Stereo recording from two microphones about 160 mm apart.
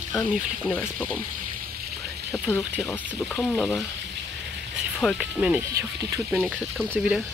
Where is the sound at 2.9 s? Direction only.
10° left (ahead or behind).